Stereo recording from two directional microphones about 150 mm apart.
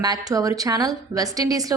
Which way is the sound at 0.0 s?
25° right (ahead or behind).